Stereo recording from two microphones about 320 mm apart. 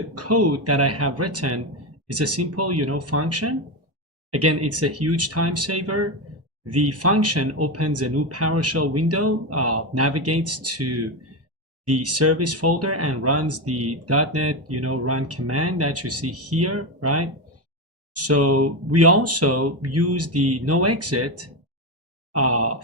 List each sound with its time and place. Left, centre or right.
0.1 s speech: right
22.3 s wail: right